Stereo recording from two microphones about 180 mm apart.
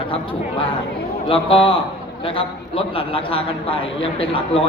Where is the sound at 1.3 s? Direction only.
30° left (ahead or behind).